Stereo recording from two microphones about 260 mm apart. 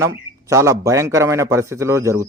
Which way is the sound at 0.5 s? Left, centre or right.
Centre.